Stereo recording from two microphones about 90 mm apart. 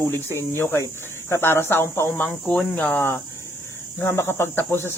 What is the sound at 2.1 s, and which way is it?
Speech, 15° left (ahead or behind).